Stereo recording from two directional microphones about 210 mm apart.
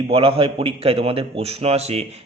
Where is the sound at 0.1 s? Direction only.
25° right (ahead or behind).